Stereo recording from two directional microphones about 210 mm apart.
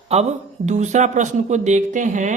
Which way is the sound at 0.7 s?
35° right (ahead or behind).